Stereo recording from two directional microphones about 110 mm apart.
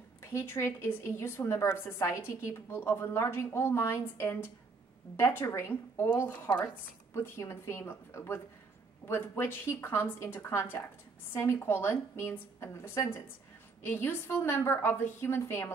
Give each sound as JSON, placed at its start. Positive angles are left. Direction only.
{"t": 0.2, "sound": "a woman's voice", "side_deg": 25}